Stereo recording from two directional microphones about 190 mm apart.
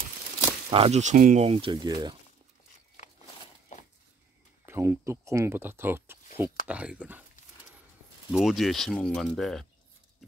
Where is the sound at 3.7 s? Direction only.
40° left (ahead or behind).